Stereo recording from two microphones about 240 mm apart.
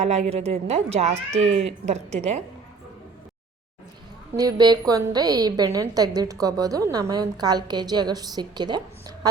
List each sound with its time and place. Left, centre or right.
0.0 s speech: right
4.4 s a woman's voice: centre